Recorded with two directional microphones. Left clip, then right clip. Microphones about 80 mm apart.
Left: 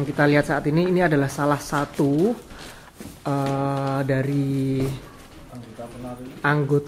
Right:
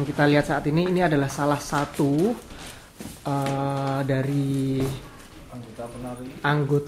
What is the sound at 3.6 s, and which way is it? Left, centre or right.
Speech, centre.